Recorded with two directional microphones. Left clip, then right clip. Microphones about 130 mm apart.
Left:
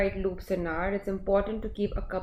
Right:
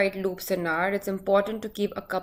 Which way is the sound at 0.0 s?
25° right (ahead or behind).